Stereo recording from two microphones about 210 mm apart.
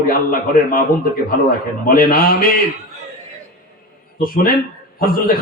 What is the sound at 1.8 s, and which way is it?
Speech, 45° left (ahead or behind).